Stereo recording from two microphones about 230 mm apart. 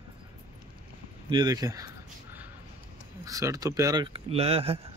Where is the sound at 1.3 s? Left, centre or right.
Centre.